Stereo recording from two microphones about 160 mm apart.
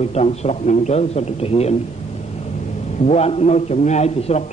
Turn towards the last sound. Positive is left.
turn(degrees=45)  # may be behind; listen again after turning